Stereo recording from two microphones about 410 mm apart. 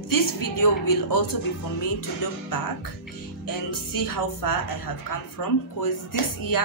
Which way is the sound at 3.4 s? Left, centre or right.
Left.